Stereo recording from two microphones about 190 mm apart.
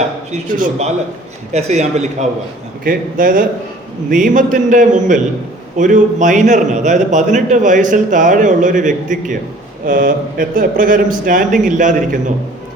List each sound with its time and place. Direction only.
0.3 s a man's voice: 40° right (ahead or behind)
2.8 s a man's voice: 45° right (ahead or behind)